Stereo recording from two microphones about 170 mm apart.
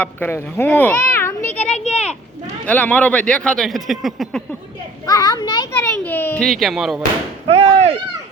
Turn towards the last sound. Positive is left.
turn(degrees=-30)  # may be behind; listen again after turning